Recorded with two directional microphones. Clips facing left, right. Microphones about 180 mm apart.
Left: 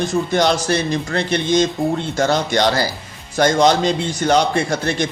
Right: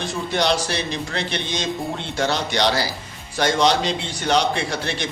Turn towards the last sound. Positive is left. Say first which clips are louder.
# left 6 dB
turn(degrees=45)  # may be behind; listen again after turning